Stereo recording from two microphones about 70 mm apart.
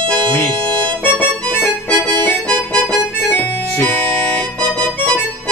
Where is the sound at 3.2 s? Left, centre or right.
Left.